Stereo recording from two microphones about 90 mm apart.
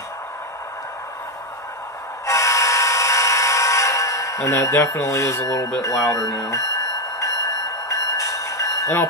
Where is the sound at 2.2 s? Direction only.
35° left (ahead or behind).